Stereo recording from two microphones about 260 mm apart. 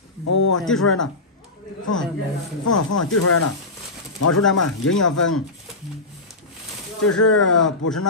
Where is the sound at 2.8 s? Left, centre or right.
Left.